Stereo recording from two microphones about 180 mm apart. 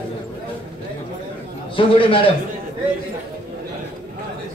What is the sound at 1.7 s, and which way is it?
Speech, 30° left (ahead or behind).